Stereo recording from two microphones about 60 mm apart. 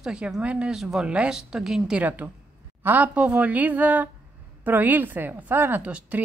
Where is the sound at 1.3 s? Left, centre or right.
Centre.